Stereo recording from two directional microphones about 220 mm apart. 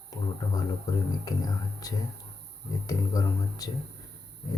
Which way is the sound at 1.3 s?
15° left (ahead or behind).